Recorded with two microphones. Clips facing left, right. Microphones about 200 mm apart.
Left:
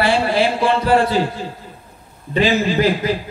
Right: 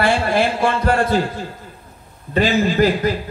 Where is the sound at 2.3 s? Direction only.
45° right (ahead or behind).